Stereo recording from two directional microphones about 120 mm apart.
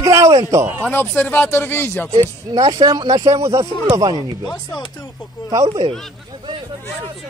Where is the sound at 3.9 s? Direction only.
35° right (ahead or behind).